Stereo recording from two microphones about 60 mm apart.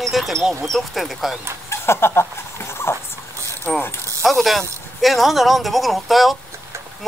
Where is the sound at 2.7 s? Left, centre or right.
Left.